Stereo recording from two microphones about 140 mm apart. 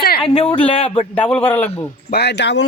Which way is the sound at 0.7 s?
40° left (ahead or behind).